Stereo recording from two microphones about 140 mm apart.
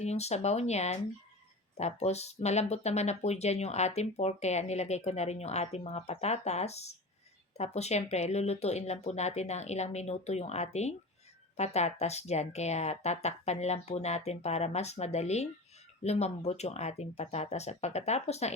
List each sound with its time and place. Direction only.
0.0 s speech: 50° left (ahead or behind)